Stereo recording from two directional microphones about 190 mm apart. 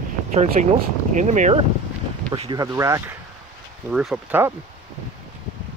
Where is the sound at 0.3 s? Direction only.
40° right (ahead or behind).